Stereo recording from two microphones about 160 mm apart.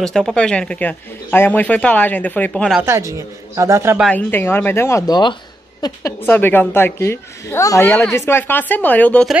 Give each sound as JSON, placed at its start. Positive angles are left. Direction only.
{"t": 0.0, "sound": "a woman's voice", "side_deg": 5}
{"t": 2.8, "sound": "speech", "side_deg": -20}
{"t": 4.1, "sound": "a woman's voice", "side_deg": 15}
{"t": 6.2, "sound": "a woman's voice", "side_deg": 10}